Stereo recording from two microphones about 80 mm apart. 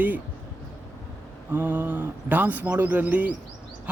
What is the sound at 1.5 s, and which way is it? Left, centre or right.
A man's voice, right.